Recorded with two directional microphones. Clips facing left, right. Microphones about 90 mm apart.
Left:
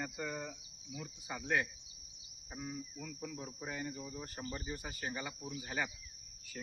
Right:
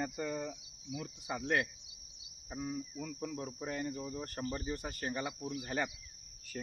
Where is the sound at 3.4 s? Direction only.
55° right (ahead or behind).